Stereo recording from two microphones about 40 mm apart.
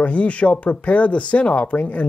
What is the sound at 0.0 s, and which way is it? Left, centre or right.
Speech, left.